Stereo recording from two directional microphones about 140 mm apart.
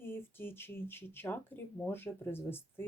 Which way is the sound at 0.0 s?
15° left (ahead or behind).